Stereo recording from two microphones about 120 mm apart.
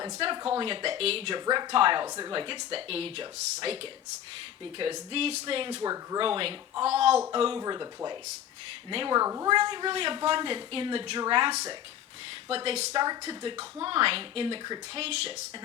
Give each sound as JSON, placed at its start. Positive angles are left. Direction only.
{"t": 0.4, "sound": "speech", "side_deg": -50}
{"t": 1.5, "sound": "speech", "side_deg": -45}
{"t": 2.0, "sound": "speech", "side_deg": -30}
{"t": 2.3, "sound": "speech", "side_deg": -40}
{"t": 5.8, "sound": "speech", "side_deg": -30}
{"t": 6.1, "sound": "speech", "side_deg": -50}
{"t": 7.6, "sound": "speech", "side_deg": -35}
{"t": 8.9, "sound": "speech", "side_deg": -50}
{"t": 9.1, "sound": "speech", "side_deg": -25}
{"t": 9.5, "sound": "speech", "side_deg": -40}
{"t": 12.9, "sound": "speech", "side_deg": -35}
{"t": 15.0, "sound": "speech", "side_deg": -55}